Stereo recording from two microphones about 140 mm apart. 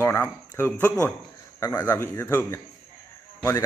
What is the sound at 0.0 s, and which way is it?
A man's voice, 15° left (ahead or behind).